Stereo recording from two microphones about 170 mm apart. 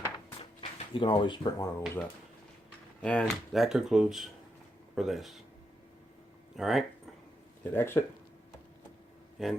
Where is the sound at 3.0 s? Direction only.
5° left (ahead or behind).